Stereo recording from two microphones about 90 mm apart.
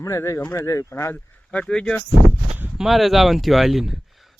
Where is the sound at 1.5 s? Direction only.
10° left (ahead or behind).